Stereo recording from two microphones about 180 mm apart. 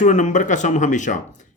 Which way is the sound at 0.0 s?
40° left (ahead or behind).